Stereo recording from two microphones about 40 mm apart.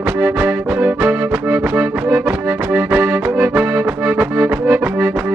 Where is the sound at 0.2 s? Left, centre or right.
Right.